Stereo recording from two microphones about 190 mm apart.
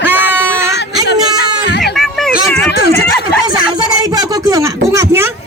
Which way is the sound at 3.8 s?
20° right (ahead or behind).